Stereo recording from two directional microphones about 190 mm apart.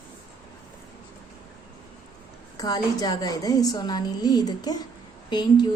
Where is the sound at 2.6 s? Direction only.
20° left (ahead or behind).